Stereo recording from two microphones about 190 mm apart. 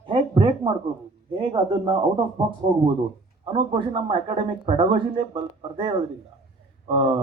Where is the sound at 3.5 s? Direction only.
25° right (ahead or behind).